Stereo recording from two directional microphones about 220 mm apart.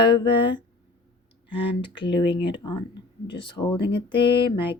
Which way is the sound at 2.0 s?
20° left (ahead or behind).